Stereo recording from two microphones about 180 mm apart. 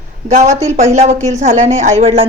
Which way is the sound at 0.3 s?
40° right (ahead or behind).